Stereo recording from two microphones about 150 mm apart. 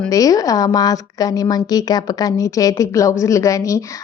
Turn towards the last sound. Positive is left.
turn(degrees=20)  # may be behind; listen again after turning